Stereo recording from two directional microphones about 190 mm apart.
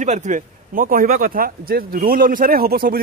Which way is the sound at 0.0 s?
40° right (ahead or behind).